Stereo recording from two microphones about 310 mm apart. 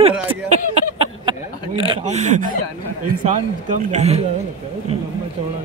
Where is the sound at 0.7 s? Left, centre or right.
Centre.